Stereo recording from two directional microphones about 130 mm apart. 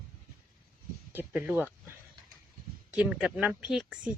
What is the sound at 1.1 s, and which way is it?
Speech, 15° right (ahead or behind).